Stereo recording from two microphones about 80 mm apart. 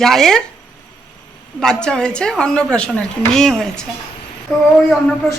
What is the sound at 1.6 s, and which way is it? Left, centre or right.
Speech, centre.